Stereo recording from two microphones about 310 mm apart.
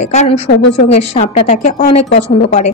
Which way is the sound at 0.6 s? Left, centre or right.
Left.